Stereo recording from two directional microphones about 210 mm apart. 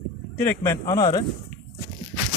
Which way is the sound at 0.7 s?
15° left (ahead or behind).